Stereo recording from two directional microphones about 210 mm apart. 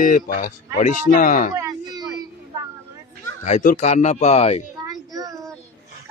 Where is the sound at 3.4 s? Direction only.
40° left (ahead or behind).